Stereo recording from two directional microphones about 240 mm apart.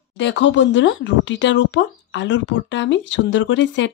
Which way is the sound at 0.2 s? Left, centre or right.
Left.